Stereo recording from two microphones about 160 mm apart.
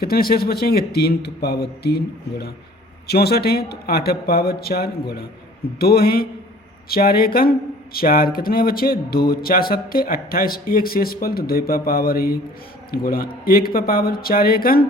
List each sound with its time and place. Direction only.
0.0 s speech: 70° left (ahead or behind)